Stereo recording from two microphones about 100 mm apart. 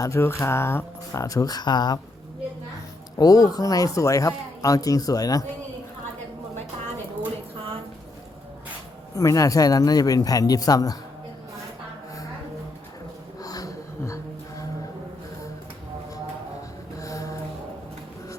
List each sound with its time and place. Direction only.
0.0 s speech: 25° left (ahead or behind); by 2.0 s 45° left (ahead or behind)
3.2 s speech: 40° left (ahead or behind)
9.1 s speech: 35° left (ahead or behind)
13.4 s a sound: 40° left (ahead or behind)
17.0 s mantra: 35° left (ahead or behind)